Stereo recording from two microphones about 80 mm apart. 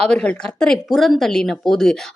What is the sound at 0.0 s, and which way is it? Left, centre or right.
A woman's voice, centre.